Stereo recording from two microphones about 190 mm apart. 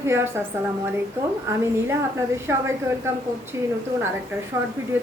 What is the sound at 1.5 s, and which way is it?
A woman's voice, 15° right (ahead or behind).